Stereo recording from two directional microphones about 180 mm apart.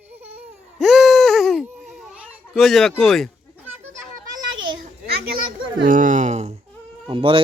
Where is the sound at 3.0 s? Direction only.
Centre (ahead or behind).